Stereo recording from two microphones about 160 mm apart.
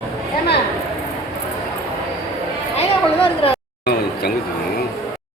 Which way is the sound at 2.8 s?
35° left (ahead or behind).